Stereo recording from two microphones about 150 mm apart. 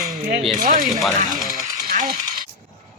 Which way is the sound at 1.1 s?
55° right (ahead or behind).